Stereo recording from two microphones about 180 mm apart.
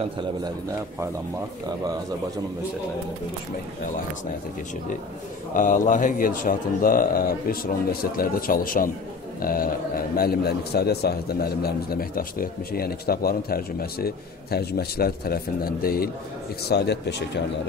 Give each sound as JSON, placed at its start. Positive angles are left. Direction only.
{"t": 5.5, "sound": "a man's voice", "side_deg": 45}